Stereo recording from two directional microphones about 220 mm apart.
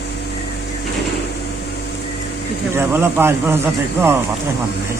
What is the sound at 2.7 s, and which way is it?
Speech, 10° right (ahead or behind).